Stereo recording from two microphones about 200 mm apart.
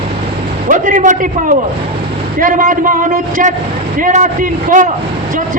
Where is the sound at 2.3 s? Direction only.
40° right (ahead or behind).